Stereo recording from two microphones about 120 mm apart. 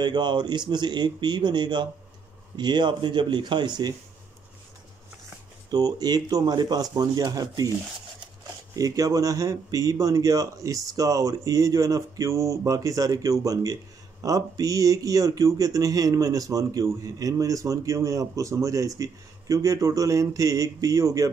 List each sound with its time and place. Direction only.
0.0 s speech: 35° right (ahead or behind)
5.7 s speech: 35° right (ahead or behind)
8.7 s speech: 30° right (ahead or behind)